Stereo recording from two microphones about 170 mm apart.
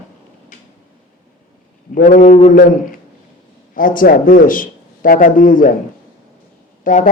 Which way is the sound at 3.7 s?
55° left (ahead or behind).